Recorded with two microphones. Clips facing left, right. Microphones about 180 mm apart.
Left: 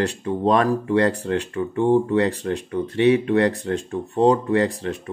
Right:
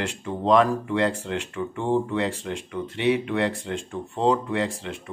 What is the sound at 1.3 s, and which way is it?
Speech, 40° left (ahead or behind).